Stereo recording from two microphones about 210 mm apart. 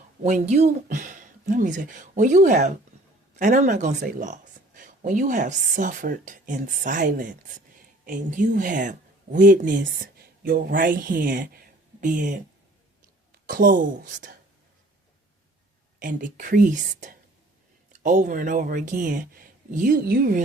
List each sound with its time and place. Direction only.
0.2 s speech: 35° right (ahead or behind)
16.0 s speech: 40° right (ahead or behind)